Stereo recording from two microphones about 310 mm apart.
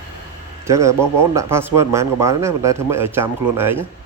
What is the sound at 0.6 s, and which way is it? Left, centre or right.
Speech, centre.